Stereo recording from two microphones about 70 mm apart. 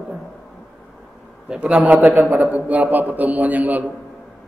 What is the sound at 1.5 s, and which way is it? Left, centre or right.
A man's voice, centre.